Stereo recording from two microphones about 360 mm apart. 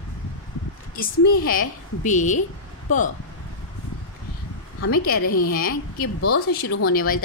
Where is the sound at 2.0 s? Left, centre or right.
Centre.